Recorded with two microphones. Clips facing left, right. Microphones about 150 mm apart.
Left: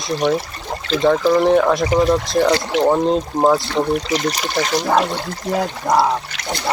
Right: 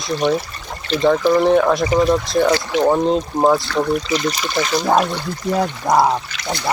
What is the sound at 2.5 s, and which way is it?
Speech, 25° left (ahead or behind).